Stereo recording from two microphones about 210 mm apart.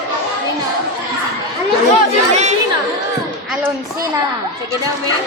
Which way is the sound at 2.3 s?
30° right (ahead or behind).